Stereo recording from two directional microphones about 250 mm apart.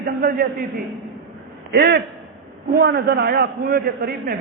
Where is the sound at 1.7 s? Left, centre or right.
Right.